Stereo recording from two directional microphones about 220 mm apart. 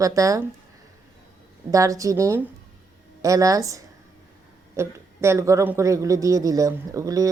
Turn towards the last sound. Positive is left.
turn(degrees=-15)  # may be behind; listen again after turning